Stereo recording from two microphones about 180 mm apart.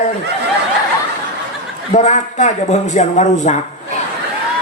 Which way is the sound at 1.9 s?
40° left (ahead or behind).